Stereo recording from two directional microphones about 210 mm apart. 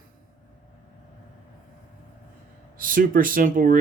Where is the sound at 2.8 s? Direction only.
40° right (ahead or behind).